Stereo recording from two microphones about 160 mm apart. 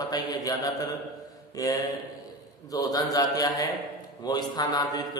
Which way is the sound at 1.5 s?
20° left (ahead or behind).